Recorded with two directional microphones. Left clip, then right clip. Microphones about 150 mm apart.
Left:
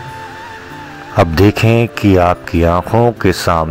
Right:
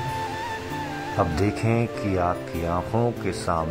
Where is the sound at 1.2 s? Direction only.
45° left (ahead or behind).